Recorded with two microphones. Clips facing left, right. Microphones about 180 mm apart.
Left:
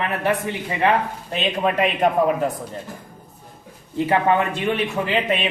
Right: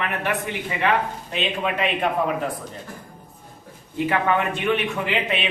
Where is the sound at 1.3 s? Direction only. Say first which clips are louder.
Left 4 dB; 40° left (ahead or behind).